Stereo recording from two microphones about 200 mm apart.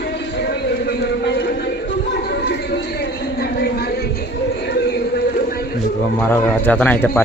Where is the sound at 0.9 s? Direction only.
60° left (ahead or behind).